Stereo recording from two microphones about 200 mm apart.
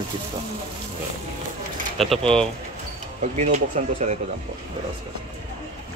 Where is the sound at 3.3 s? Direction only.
35° right (ahead or behind).